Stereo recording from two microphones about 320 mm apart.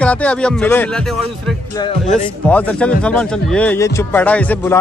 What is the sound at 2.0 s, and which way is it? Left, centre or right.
A man's voice, centre.